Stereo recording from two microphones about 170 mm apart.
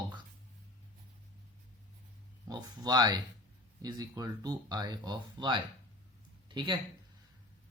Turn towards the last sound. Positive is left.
turn(degrees=-25)  # may be behind; listen again after turning